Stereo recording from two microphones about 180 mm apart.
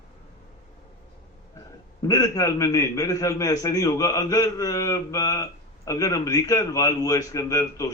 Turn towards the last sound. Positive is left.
turn(degrees=20)  # may be behind; listen again after turning